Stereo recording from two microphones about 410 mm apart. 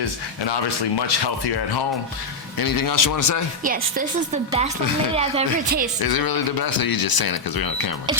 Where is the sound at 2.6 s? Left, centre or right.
Left.